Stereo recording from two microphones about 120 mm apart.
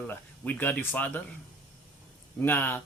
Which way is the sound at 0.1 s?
15° left (ahead or behind).